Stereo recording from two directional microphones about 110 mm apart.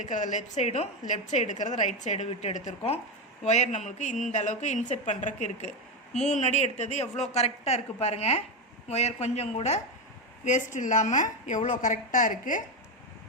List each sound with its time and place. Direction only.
0.0 s a woman's voice: 90° left
8.9 s a woman's voice: 90° left